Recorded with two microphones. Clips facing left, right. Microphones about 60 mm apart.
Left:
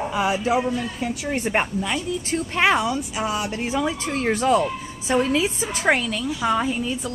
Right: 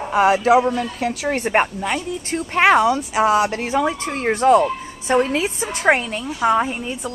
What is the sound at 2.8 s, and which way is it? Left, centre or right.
Speech, right.